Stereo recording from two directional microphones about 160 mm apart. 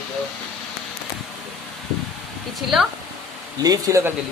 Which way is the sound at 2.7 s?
Centre (ahead or behind).